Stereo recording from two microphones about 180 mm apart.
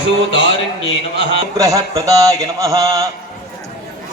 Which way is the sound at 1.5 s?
20° right (ahead or behind).